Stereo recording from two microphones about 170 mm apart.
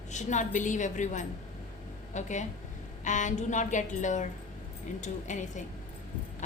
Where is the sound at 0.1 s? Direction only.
45° left (ahead or behind).